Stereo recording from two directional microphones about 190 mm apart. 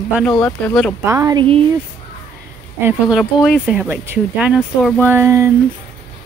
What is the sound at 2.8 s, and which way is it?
Speech, centre (ahead or behind).